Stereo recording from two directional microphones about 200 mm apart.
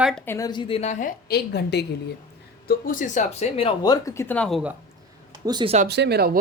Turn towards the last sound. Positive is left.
turn(degrees=-50)  # may be behind; listen again after turning